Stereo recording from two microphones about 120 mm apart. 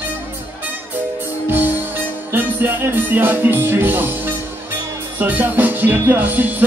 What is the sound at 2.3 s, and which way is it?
Music, 15° right (ahead or behind).